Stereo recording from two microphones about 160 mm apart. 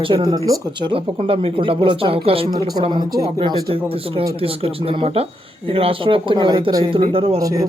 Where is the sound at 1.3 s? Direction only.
35° right (ahead or behind).